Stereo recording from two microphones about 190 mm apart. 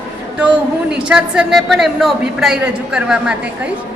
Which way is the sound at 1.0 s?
5° right (ahead or behind).